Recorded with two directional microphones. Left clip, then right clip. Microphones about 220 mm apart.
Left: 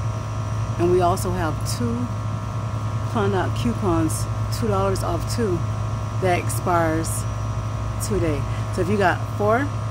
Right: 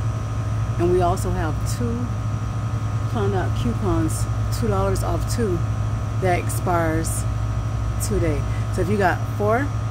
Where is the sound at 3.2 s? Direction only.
15° left (ahead or behind).